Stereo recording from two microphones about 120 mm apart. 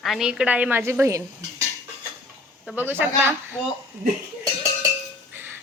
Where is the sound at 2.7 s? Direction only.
15° right (ahead or behind).